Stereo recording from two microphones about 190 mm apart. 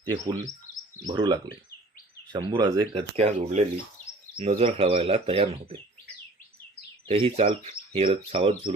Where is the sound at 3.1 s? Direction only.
35° right (ahead or behind).